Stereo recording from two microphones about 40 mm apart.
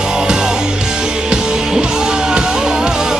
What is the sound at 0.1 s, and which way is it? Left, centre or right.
Music, centre.